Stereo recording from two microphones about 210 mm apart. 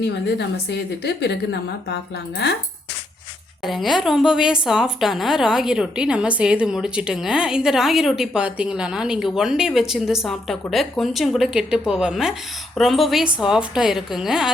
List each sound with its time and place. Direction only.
0.0 s a woman's voice: 55° left (ahead or behind)
3.6 s a woman's voice: centre (ahead or behind)